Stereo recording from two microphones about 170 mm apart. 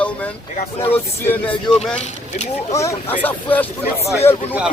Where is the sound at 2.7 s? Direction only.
15° left (ahead or behind).